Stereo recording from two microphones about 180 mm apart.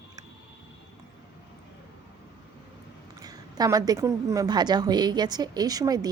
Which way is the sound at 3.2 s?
20° right (ahead or behind).